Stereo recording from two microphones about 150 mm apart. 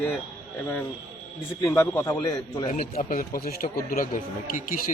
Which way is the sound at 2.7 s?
65° left (ahead or behind).